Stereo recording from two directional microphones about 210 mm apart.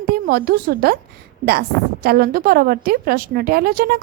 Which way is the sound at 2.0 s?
45° right (ahead or behind).